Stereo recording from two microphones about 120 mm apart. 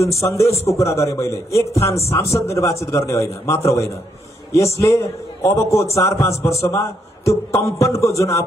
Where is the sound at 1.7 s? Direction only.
60° left (ahead or behind).